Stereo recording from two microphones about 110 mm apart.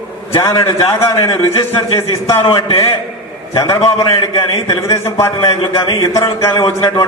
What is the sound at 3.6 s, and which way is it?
A man's voice, 30° left (ahead or behind).